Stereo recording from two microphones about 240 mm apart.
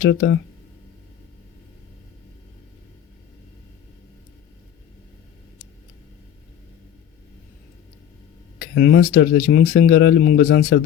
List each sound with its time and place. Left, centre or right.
0.0 s speech: left
8.5 s a sound: left
9.1 s speech: left